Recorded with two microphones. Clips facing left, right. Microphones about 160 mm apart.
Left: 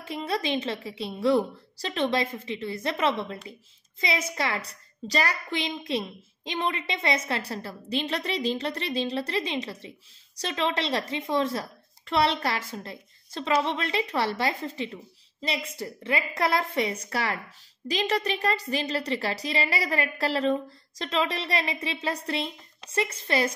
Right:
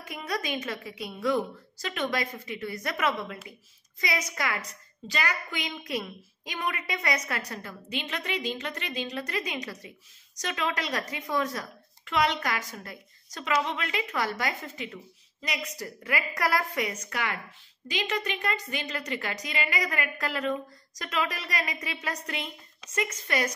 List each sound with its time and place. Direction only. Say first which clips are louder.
0.0 s a woman's voice: left 4 dB; 30° left (ahead or behind)